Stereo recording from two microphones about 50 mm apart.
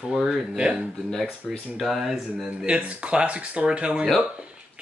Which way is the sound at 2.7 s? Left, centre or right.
Right.